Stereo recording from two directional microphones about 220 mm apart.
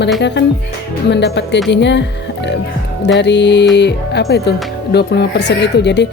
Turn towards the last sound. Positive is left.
turn(degrees=50)  # may be behind; listen again after turning